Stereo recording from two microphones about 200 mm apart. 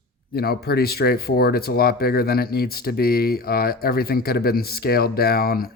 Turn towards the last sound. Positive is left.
turn(degrees=50)  # may be behind; listen again after turning